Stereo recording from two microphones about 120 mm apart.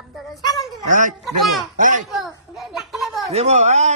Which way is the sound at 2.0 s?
Centre (ahead or behind).